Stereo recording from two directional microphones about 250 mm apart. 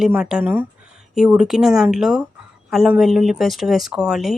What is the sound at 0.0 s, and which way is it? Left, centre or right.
Speech, centre.